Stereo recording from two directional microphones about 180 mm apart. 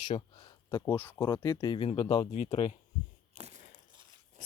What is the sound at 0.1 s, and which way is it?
Speech, 25° left (ahead or behind).